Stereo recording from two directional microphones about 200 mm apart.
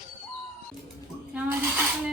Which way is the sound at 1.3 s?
5° right (ahead or behind).